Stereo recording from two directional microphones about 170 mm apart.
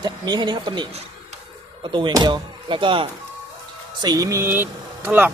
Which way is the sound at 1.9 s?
30° right (ahead or behind).